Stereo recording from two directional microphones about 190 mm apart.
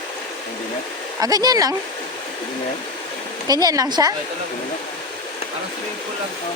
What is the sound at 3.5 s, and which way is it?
Speech, 20° right (ahead or behind).